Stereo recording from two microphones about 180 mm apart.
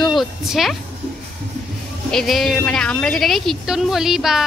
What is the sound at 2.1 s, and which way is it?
Speech, centre (ahead or behind).